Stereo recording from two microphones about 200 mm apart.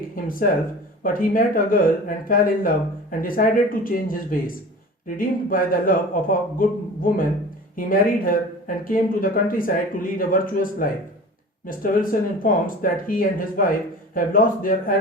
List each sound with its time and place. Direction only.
0.3 s speech: 45° left (ahead or behind)